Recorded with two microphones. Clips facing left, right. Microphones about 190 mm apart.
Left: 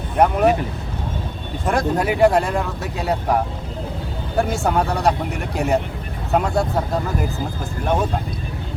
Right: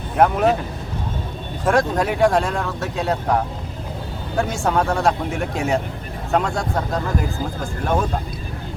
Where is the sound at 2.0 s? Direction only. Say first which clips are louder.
Left 1 dB; centre (ahead or behind).